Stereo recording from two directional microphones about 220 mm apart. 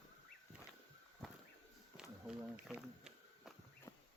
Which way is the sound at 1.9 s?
5° right (ahead or behind).